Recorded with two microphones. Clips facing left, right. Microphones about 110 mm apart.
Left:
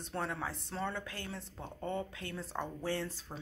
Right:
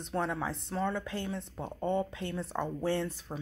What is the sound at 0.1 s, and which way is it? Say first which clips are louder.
A woman's voice: right 5 dB; 15° right (ahead or behind).